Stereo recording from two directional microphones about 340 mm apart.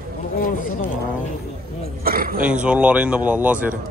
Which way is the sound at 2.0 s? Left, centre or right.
Right.